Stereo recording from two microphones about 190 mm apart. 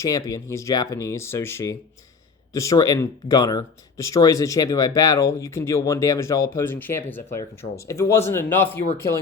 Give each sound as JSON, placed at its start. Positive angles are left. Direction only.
{"t": 0.0, "sound": "speech", "side_deg": 20}